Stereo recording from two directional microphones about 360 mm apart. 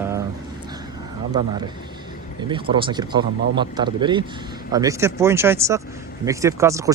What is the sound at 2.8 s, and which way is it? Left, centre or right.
Speech, centre.